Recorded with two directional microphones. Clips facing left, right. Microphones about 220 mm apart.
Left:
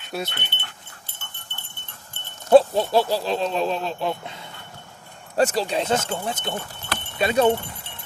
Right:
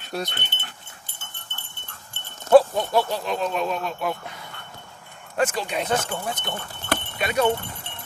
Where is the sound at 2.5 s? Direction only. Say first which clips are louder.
Left 1 dB; 30° left (ahead or behind).